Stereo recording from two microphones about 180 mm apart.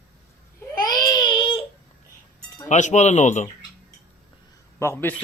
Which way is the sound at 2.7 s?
40° left (ahead or behind).